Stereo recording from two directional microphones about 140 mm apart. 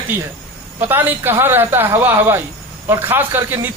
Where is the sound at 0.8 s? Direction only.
15° right (ahead or behind).